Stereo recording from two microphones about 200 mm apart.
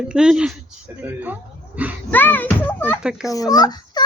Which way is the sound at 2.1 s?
10° left (ahead or behind).